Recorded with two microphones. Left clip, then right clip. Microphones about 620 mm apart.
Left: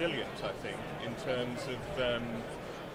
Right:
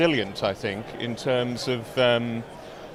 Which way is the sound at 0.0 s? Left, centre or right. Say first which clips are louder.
Right 12 dB; right.